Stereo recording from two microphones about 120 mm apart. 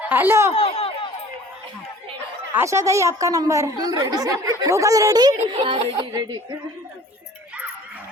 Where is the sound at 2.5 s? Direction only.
20° right (ahead or behind).